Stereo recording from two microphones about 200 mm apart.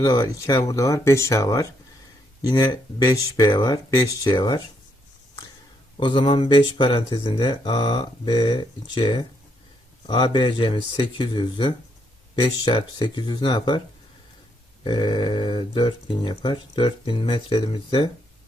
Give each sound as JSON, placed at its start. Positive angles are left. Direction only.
{"t": 0.0, "sound": "speech", "side_deg": 20}
{"t": 6.0, "sound": "speech", "side_deg": 25}
{"t": 14.8, "sound": "speech", "side_deg": 20}